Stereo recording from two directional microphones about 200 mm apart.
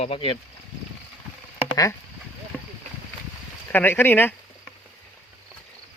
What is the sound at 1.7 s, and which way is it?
Speech, 15° left (ahead or behind).